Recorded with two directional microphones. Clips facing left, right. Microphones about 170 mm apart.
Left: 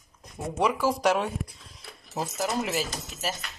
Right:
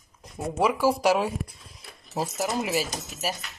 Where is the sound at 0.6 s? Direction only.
10° right (ahead or behind).